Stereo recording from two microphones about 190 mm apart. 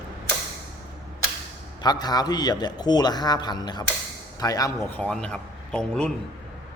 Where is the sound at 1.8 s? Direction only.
20° left (ahead or behind); by 6.1 s 5° left (ahead or behind).